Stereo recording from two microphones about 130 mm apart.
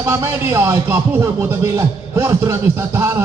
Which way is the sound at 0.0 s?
20° right (ahead or behind).